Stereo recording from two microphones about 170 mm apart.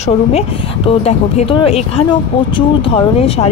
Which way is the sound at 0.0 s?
40° left (ahead or behind).